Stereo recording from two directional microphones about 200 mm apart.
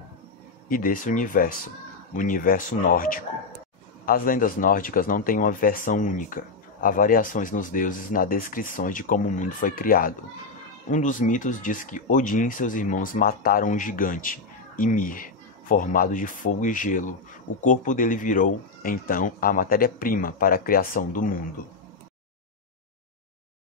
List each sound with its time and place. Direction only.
0.7 s speech: 45° left (ahead or behind)